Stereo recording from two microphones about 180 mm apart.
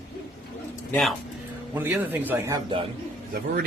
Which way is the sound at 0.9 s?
5° left (ahead or behind).